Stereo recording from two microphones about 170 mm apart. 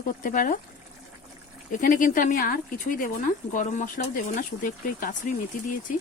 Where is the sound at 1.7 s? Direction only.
50° left (ahead or behind).